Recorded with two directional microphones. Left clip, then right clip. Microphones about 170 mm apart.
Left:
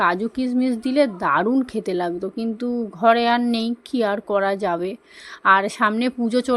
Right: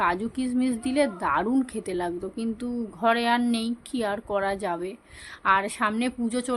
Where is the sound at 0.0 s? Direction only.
25° left (ahead or behind).